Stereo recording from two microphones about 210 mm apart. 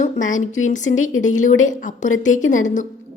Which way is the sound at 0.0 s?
35° left (ahead or behind).